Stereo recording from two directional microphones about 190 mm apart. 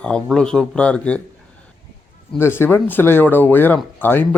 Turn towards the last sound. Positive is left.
turn(degrees=10)  # may be behind; listen again after turning